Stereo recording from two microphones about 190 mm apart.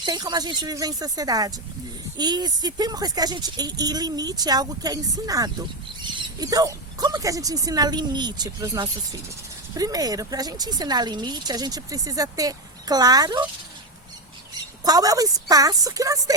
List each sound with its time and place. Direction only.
0.0 s speech: 20° right (ahead or behind)
14.8 s speech: 20° right (ahead or behind)